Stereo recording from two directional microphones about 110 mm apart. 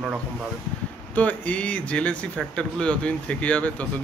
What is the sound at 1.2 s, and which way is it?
Speech, 15° left (ahead or behind).